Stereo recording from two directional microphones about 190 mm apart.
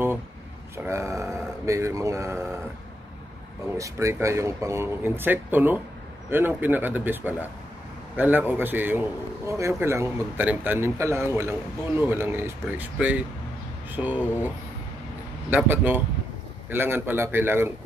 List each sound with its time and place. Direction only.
0.8 s speech: 15° right (ahead or behind)
3.7 s speech: 15° right (ahead or behind)
15.5 s speech: 10° right (ahead or behind)